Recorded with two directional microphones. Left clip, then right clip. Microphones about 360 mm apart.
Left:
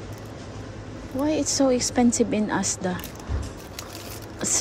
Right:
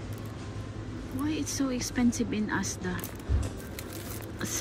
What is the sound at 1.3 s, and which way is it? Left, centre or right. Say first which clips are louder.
A woman's voice: left 12 dB; centre.